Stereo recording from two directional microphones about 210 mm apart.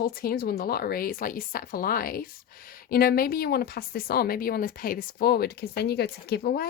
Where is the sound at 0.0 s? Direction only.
45° left (ahead or behind).